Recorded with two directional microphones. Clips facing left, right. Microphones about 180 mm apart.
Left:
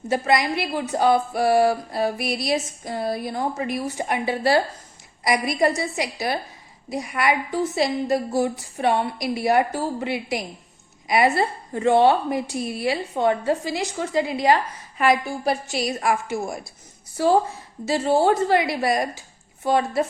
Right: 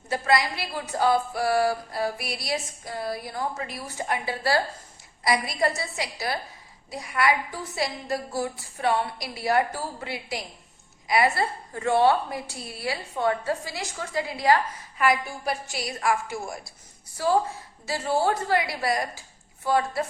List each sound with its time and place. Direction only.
0.1 s a woman's voice: 20° left (ahead or behind)
17.8 s a woman's voice: 25° left (ahead or behind)